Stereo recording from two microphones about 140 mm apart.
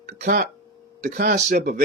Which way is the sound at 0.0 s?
85° right.